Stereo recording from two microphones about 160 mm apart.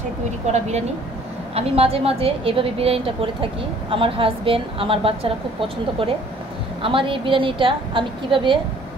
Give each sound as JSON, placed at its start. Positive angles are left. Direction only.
{"t": 0.5, "sound": "a woman's voice", "side_deg": -45}